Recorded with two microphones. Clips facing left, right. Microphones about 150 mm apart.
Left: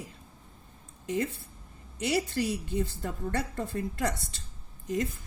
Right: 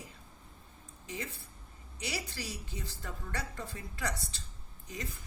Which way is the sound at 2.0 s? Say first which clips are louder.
Left 12 dB; 55° left (ahead or behind).